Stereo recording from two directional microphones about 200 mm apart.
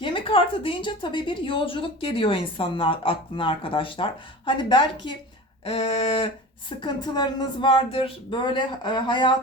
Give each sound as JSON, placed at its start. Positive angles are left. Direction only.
{"t": 0.0, "sound": "a woman's voice", "side_deg": 25}